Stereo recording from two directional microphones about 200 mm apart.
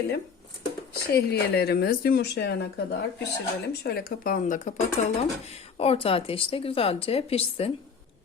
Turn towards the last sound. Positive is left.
turn(degrees=30)  # may be behind; listen again after turning